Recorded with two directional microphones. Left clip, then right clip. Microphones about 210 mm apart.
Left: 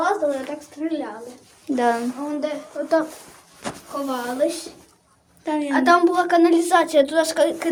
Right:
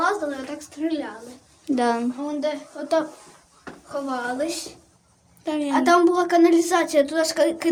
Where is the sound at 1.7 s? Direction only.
10° right (ahead or behind).